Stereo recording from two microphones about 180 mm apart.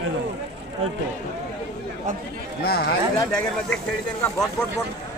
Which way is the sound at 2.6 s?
60° left (ahead or behind).